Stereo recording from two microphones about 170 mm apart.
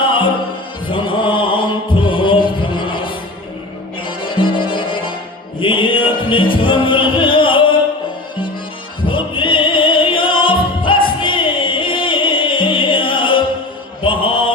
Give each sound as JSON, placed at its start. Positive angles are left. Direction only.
{"t": 0.9, "sound": "music", "side_deg": 30}
{"t": 9.0, "sound": "music", "side_deg": 30}
{"t": 14.0, "sound": "mantra", "side_deg": 30}